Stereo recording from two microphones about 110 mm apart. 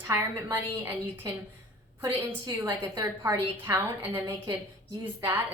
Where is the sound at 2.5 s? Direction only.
35° right (ahead or behind).